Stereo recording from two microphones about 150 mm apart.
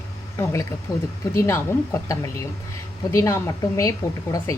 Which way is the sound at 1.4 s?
15° left (ahead or behind).